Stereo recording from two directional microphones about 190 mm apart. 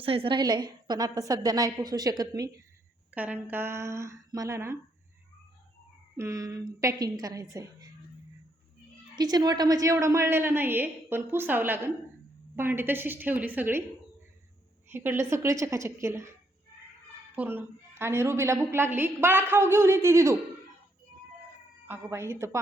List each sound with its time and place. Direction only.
0.0 s a woman's voice: 30° right (ahead or behind)
3.2 s a woman's voice: 10° right (ahead or behind)
6.1 s a woman's voice: 15° right (ahead or behind)
9.1 s a woman's voice: 20° right (ahead or behind)
14.8 s a woman's voice: 10° right (ahead or behind)
17.3 s a woman's voice: 10° right (ahead or behind)
21.8 s a woman's voice: 15° right (ahead or behind)